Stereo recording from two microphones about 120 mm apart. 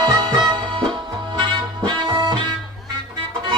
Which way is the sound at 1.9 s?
40° right (ahead or behind).